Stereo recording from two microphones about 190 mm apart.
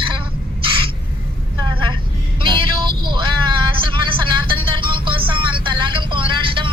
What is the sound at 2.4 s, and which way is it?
Vehicle, 25° right (ahead or behind).